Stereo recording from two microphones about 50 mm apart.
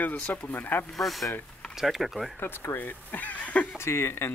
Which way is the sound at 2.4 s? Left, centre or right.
Left.